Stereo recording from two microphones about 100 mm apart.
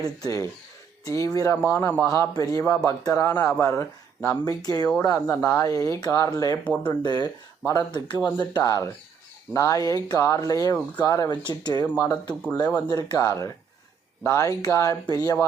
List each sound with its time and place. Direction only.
0.0 s a man's voice: 35° left (ahead or behind)
7.9 s speech: 50° left (ahead or behind)
8.5 s speech: 35° left (ahead or behind)
11.3 s speech: 50° left (ahead or behind)
12.3 s speech: 10° left (ahead or behind)
12.5 s speech: 40° left (ahead or behind)